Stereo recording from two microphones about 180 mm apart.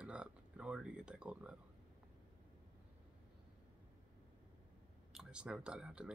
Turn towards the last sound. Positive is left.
turn(degrees=-5)  # may be behind; listen again after turning